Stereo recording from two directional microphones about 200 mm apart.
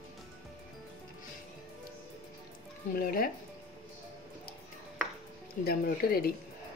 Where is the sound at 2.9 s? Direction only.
45° left (ahead or behind).